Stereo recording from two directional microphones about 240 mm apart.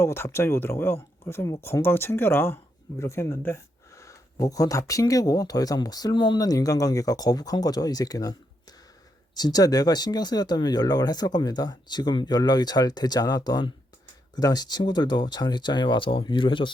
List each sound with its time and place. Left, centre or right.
0.0 s speech: centre